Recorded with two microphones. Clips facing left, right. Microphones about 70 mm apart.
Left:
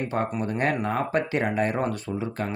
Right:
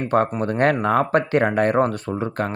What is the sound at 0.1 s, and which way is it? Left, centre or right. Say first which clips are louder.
Speech: right 7 dB; right.